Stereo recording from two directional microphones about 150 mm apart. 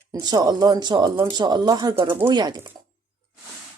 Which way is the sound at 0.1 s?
25° right (ahead or behind).